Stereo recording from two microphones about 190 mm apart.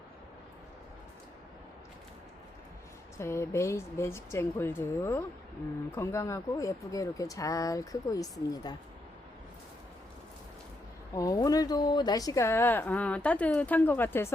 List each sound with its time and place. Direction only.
3.2 s speech: 15° left (ahead or behind)
11.2 s speech: 20° left (ahead or behind)